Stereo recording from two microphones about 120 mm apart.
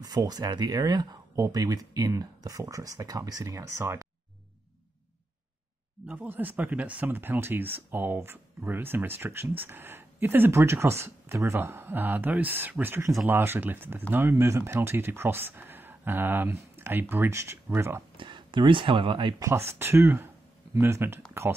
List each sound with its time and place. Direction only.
0.0 s speech: 30° right (ahead or behind)
6.0 s speech: 15° right (ahead or behind)
18.1 s speech: 45° right (ahead or behind)
19.8 s speech: 20° right (ahead or behind)
21.3 s a sound: 20° right (ahead or behind)